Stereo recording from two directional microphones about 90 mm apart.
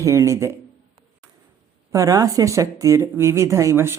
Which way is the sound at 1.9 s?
40° right (ahead or behind).